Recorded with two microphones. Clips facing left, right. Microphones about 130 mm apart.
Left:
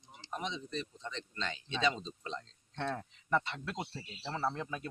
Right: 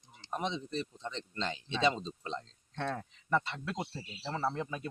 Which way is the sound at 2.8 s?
Centre (ahead or behind).